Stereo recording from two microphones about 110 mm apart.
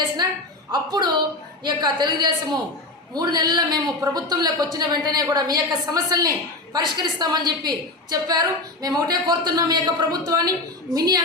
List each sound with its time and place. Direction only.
0.7 s a woman's voice: 40° right (ahead or behind)